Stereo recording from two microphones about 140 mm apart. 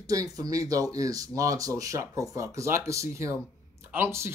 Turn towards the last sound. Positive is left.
turn(degrees=-15)  # may be behind; listen again after turning